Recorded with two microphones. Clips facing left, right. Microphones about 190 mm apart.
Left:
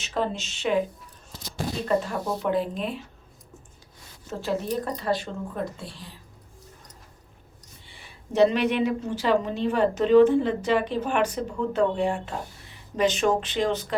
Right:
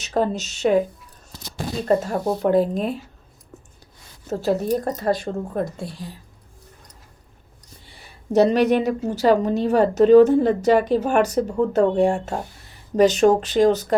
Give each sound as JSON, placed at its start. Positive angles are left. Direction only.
{"t": 0.0, "sound": "a woman's voice", "side_deg": -40}
{"t": 4.3, "sound": "speech", "side_deg": -40}
{"t": 7.9, "sound": "a woman's voice", "side_deg": -40}